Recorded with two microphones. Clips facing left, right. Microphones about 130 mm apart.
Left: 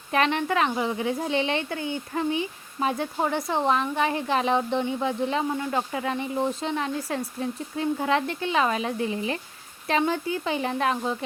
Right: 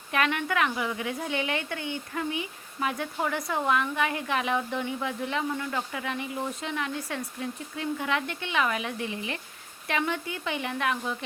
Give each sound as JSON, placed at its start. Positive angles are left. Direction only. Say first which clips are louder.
{"t": 0.1, "sound": "a woman's voice", "louder": "left 4 dB", "side_deg": 30}